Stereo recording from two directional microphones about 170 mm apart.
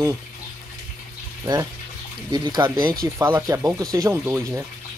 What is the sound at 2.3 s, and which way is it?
Speech, 25° right (ahead or behind).